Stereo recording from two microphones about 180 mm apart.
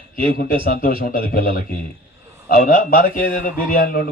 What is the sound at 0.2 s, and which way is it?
A man's voice, 55° left (ahead or behind).